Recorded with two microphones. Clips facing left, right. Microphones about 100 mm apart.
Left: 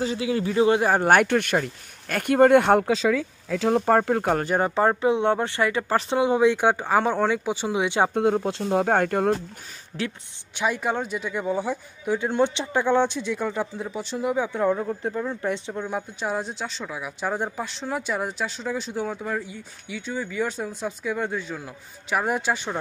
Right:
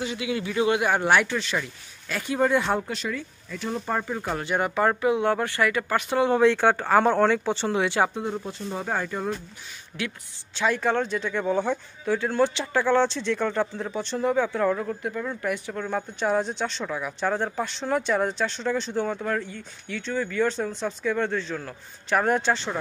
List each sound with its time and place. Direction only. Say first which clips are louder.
0.0 s speech: left 4 dB; 35° left (ahead or behind)
1.2 s speech: left 6 dB; 60° left (ahead or behind); by 6.1 s 30° left (ahead or behind)
6.1 s speech: even; 10° left (ahead or behind)
8.1 s speech: left 8 dB; 65° left (ahead or behind)
9.9 s speech: left 2 dB; 25° left (ahead or behind); by 11.8 s 5° left (ahead or behind)
12.1 s speech: even; 20° left (ahead or behind)
16.0 s speech: right 4 dB; 5° left (ahead or behind)